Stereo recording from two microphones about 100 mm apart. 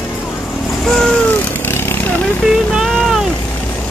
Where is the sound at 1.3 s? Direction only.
20° left (ahead or behind).